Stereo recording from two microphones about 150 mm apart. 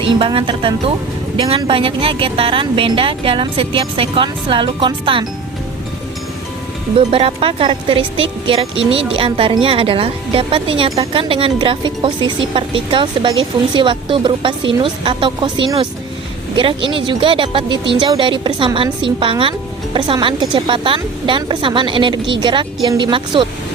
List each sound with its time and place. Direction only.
0.0 s speech: 35° right (ahead or behind)
7.1 s speech: 40° right (ahead or behind)